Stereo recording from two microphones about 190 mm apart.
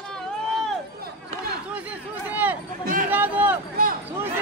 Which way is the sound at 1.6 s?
5° right (ahead or behind).